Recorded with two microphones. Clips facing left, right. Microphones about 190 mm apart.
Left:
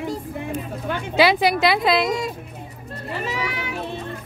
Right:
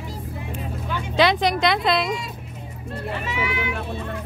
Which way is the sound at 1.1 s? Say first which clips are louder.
Left 2 dB; 5° left (ahead or behind).